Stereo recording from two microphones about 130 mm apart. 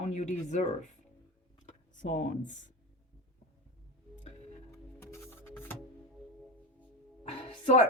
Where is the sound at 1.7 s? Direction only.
65° left (ahead or behind).